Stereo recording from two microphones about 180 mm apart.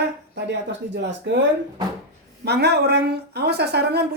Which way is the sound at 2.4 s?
65° right (ahead or behind).